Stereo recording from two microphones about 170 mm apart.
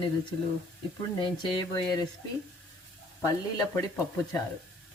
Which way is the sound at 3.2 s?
20° left (ahead or behind).